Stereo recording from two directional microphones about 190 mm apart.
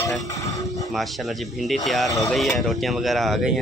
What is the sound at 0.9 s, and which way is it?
Speech, centre (ahead or behind).